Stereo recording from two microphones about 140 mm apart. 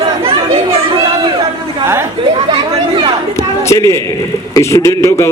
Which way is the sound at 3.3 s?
20° left (ahead or behind).